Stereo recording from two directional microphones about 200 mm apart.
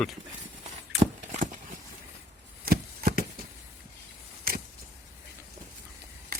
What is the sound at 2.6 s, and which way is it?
Chopping, 50° right (ahead or behind).